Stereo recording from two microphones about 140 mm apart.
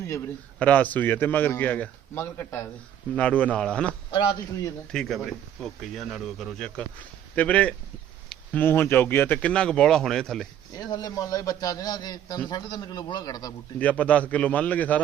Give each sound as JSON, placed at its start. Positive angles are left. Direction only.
{"t": 0.6, "sound": "speech", "side_deg": 10}
{"t": 10.8, "sound": "a man's voice", "side_deg": 30}
{"t": 13.7, "sound": "speech", "side_deg": 10}